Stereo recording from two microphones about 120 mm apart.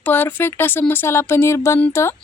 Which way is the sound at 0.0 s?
15° left (ahead or behind).